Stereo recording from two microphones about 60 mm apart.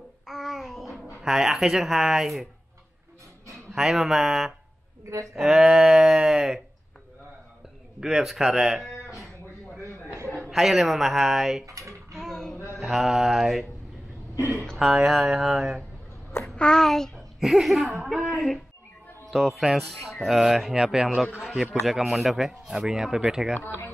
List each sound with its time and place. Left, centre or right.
0.3 s child singing: centre
1.2 s speech: centre
3.7 s speech: centre
8.0 s speech: centre
10.5 s speech: centre
11.6 s a sound: right
12.2 s music: centre
12.7 s mantra: centre
14.3 s speech: left
14.8 s speech: centre
16.4 s a child's voice: centre
17.4 s speech: centre